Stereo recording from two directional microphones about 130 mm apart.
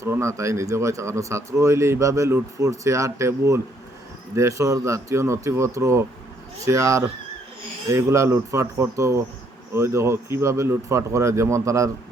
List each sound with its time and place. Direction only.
0.0 s speech: 20° right (ahead or behind)